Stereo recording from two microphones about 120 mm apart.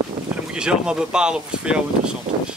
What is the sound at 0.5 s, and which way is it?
Speech, 5° right (ahead or behind).